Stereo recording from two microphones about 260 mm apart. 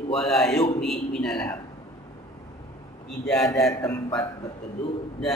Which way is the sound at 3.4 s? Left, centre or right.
Centre.